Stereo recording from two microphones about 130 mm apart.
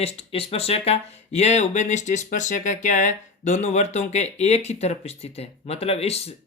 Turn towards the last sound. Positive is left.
turn(degrees=50)  # may be behind; listen again after turning